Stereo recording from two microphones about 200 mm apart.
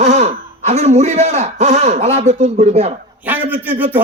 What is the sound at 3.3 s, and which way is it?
Speech, 10° right (ahead or behind).